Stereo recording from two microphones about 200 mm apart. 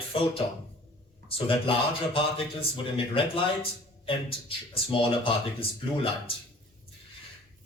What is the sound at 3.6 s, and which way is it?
Speech, 25° left (ahead or behind).